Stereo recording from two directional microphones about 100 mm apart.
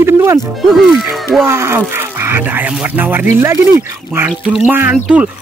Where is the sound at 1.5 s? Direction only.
25° right (ahead or behind).